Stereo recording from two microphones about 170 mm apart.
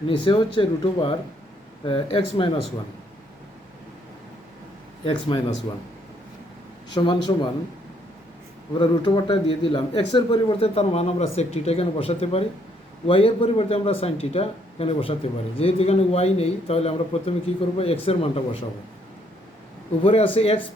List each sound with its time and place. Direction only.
0.1 s a man's voice: 30° left (ahead or behind)
5.0 s speech: 30° left (ahead or behind)
6.9 s speech: 25° left (ahead or behind)
8.8 s a man's voice: 30° left (ahead or behind)
20.1 s a man's voice: 35° left (ahead or behind)